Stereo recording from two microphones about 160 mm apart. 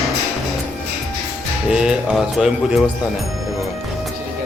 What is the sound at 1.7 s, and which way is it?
Speech, 5° right (ahead or behind).